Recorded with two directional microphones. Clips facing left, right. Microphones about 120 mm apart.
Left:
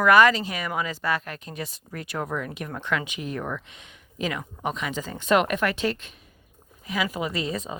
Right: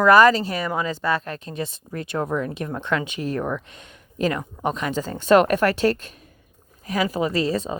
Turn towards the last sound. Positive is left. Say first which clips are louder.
# right 6 dB
turn(degrees=-30)  # may be behind; listen again after turning